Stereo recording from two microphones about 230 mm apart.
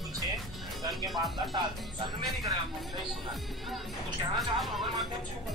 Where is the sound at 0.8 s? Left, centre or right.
Centre.